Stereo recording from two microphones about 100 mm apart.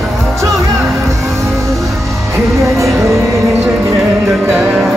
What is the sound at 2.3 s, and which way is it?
Music, 30° right (ahead or behind).